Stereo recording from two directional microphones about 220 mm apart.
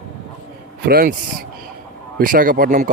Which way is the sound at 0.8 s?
40° right (ahead or behind).